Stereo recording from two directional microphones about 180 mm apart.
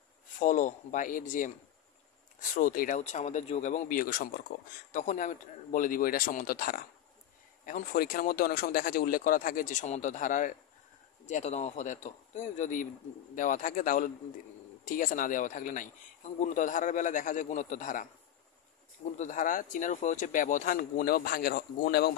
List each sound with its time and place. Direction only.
0.4 s a man's voice: 45° left (ahead or behind)
2.5 s a man's voice: 50° left (ahead or behind)
19.1 s a man's voice: 45° left (ahead or behind)